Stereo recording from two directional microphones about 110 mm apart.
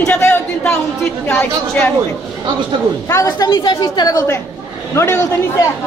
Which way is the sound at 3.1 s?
30° left (ahead or behind).